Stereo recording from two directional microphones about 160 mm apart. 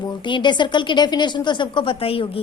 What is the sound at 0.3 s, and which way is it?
A woman's voice, 30° left (ahead or behind).